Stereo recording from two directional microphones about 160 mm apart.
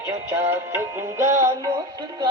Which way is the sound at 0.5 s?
15° right (ahead or behind).